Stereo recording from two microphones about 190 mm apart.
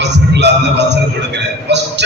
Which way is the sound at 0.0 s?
65° right (ahead or behind).